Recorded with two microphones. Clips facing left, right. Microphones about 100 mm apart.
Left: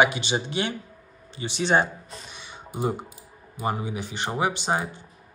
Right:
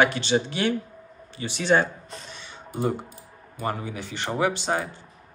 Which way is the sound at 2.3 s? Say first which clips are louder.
Right 1 dB; 15° left (ahead or behind).